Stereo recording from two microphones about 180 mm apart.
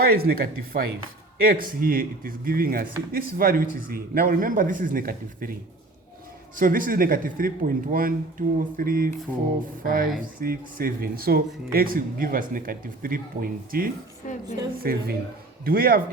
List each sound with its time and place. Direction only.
0.0 s speech: 55° right (ahead or behind)
6.6 s speech: 50° right (ahead or behind)